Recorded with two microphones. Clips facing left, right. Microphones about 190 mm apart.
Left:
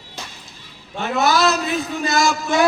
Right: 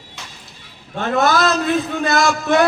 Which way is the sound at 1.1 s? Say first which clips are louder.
Right 1 dB; 50° right (ahead or behind).